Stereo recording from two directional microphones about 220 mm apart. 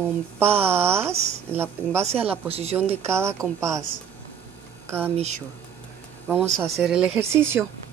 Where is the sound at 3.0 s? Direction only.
10° right (ahead or behind).